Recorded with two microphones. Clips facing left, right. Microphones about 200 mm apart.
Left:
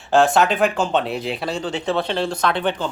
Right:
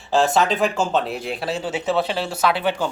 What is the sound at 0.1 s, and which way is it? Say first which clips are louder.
Speech: left 2 dB; centre (ahead or behind).